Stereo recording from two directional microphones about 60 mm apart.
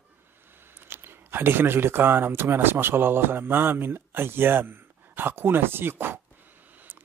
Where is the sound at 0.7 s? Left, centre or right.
Right.